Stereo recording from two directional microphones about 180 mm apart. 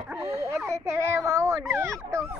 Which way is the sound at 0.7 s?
15° right (ahead or behind).